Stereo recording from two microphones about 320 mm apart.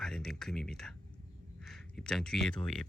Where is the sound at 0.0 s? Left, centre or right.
Centre.